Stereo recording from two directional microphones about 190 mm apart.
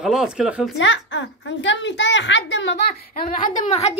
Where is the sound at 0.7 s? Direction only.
75° left (ahead or behind).